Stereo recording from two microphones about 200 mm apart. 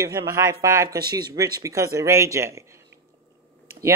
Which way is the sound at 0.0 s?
15° right (ahead or behind).